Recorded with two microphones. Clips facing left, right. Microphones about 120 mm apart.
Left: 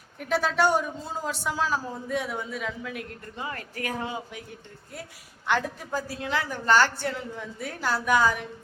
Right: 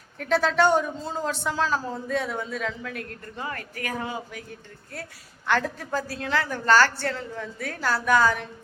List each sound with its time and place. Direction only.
0.2 s a woman's voice: 10° left (ahead or behind)
5.5 s a woman's voice: 15° left (ahead or behind)